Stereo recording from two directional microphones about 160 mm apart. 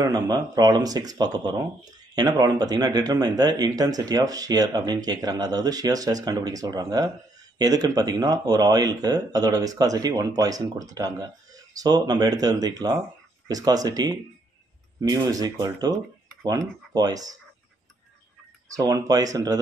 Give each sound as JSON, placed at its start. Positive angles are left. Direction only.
{"t": 0.0, "sound": "speech", "side_deg": -25}
{"t": 18.7, "sound": "speech", "side_deg": -20}